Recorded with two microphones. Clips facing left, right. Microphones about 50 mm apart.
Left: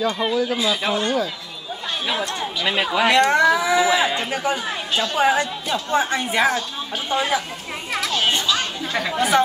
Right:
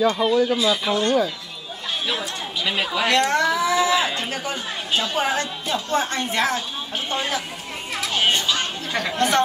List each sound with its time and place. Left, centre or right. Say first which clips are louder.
0.0 s speech: right 3 dB; centre
2.6 s speech: left 3 dB; centre
8.9 s speech: left 2 dB; centre